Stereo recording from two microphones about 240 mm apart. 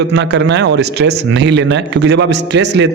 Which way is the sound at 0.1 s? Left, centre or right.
Right.